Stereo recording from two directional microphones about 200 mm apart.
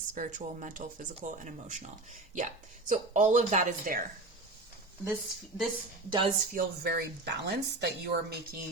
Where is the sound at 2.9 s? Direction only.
40° right (ahead or behind).